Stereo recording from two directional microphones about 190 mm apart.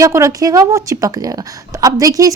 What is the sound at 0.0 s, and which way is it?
A woman's voice, 15° right (ahead or behind).